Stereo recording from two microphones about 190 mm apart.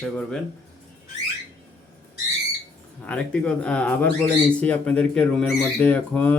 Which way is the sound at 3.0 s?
5° left (ahead or behind).